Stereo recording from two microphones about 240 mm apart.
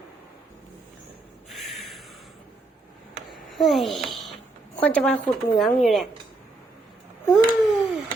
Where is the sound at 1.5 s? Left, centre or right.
Centre.